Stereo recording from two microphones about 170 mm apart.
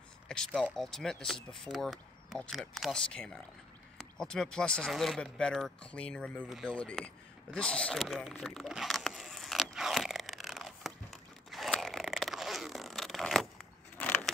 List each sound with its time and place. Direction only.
0.5 s speech: 5° right (ahead or behind)
7.5 s a sound: 5° left (ahead or behind)
13.9 s vehicle: 10° left (ahead or behind)